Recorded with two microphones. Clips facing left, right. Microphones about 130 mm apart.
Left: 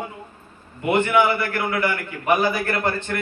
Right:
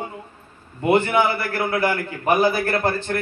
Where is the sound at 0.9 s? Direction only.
35° right (ahead or behind).